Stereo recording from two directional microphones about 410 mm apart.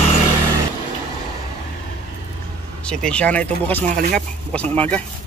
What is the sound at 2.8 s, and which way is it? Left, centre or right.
Speech, centre.